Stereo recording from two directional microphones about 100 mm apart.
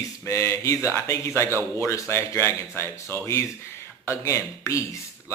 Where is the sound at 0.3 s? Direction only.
30° left (ahead or behind).